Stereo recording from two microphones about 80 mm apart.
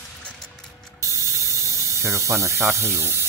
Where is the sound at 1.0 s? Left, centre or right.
Right.